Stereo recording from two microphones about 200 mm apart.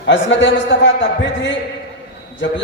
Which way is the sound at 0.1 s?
65° left (ahead or behind).